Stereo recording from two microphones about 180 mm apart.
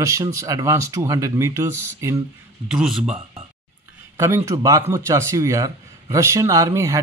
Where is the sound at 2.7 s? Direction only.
5° right (ahead or behind).